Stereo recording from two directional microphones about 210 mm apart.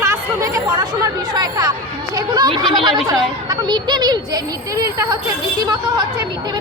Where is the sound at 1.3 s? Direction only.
15° right (ahead or behind).